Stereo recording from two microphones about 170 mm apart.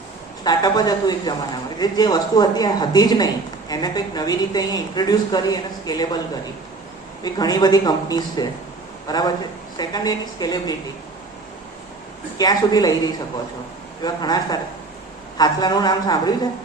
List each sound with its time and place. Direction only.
0.4 s a man's voice: 25° left (ahead or behind)
7.3 s a man's voice: 25° left (ahead or behind)
12.4 s a man's voice: 20° left (ahead or behind)